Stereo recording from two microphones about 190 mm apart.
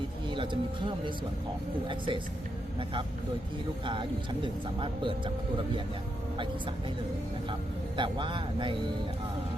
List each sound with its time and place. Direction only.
1.9 s speech: 25° right (ahead or behind)
3.8 s speech: 25° right (ahead or behind)
7.9 s speech: 25° right (ahead or behind)